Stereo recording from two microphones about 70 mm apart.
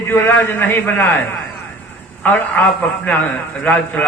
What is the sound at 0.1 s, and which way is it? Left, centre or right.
A man's voice, left.